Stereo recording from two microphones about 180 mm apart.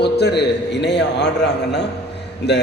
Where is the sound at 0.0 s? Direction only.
70° left (ahead or behind).